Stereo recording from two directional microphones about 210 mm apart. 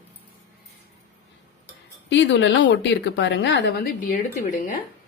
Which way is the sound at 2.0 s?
60° left (ahead or behind).